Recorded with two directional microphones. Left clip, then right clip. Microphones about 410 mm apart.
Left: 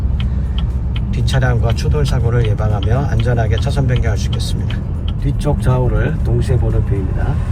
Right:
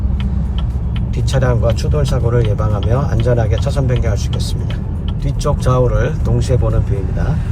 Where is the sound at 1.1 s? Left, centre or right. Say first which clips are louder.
Right 2 dB; centre.